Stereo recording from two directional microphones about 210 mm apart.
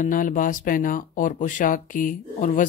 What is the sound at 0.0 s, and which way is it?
Speech, 40° left (ahead or behind).